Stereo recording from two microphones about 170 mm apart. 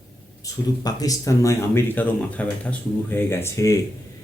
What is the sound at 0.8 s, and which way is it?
Speech, 20° left (ahead or behind).